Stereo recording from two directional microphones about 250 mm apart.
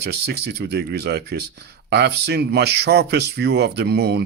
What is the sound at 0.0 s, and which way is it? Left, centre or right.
Speech, right.